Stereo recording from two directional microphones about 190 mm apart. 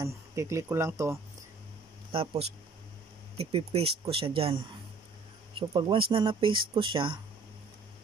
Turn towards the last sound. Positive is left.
turn(degrees=-25)  # may be behind; listen again after turning